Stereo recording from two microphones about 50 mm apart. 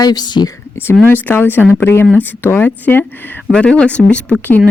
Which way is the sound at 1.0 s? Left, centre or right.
Left.